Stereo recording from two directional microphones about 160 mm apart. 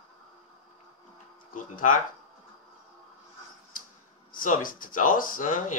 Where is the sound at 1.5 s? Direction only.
55° left (ahead or behind).